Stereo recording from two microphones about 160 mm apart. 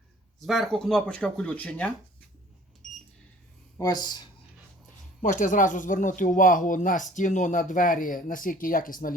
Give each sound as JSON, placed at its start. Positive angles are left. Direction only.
{"t": 0.3, "sound": "speech", "side_deg": 0}
{"t": 3.8, "sound": "speech", "side_deg": 25}
{"t": 5.2, "sound": "speech", "side_deg": 55}